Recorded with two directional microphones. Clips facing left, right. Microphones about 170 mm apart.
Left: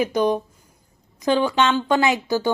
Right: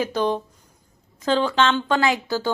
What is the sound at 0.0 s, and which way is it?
Speech, 15° left (ahead or behind).